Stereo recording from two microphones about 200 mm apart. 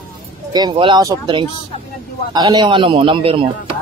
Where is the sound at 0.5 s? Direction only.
20° right (ahead or behind).